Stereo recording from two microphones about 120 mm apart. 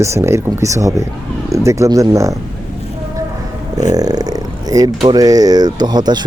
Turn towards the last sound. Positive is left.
turn(degrees=-35)  # may be behind; listen again after turning